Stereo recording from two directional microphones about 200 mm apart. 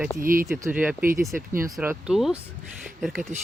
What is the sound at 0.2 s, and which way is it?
Speech, 45° right (ahead or behind).